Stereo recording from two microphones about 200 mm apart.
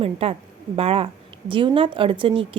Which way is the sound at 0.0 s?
30° right (ahead or behind).